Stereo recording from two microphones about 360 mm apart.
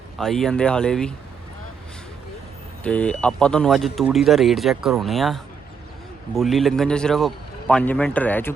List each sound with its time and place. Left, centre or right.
0.2 s speech: centre
2.8 s speech: centre